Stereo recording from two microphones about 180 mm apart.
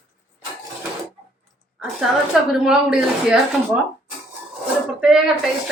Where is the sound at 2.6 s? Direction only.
5° right (ahead or behind).